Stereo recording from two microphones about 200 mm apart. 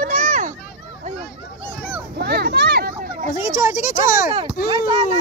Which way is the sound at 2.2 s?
55° right (ahead or behind).